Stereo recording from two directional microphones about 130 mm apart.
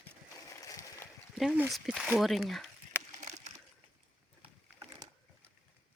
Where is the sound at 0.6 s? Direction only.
25° left (ahead or behind).